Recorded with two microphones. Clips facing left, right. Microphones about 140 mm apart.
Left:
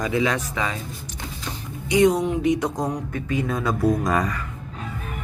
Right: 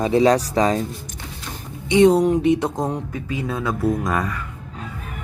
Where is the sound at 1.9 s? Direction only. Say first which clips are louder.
Right 4 dB; 30° right (ahead or behind).